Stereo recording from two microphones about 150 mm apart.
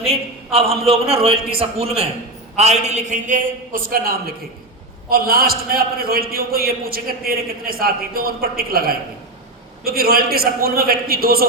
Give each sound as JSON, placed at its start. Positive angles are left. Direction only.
{"t": 0.0, "sound": "a man's voice", "side_deg": -40}